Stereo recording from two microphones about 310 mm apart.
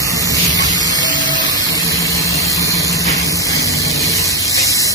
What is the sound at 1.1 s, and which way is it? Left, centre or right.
Printer, left.